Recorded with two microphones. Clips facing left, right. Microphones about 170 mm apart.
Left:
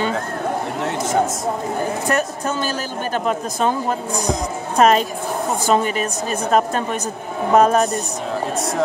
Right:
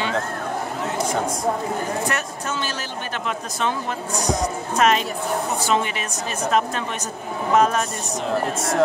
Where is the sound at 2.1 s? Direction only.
35° left (ahead or behind).